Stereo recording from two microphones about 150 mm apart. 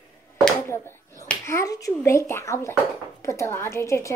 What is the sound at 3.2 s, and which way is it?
Speech, 20° left (ahead or behind).